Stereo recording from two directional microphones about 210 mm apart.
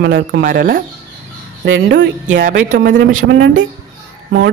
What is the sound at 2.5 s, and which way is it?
Speech, 40° right (ahead or behind).